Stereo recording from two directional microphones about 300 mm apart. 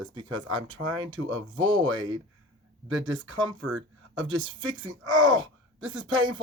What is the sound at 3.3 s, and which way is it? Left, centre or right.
Speech, centre.